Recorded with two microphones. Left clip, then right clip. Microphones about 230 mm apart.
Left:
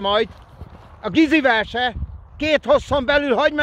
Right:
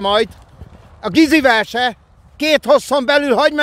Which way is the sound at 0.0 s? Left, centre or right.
Right.